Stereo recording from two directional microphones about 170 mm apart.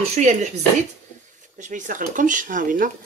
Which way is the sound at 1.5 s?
50° right (ahead or behind).